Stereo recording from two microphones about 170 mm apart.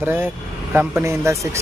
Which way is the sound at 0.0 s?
10° right (ahead or behind).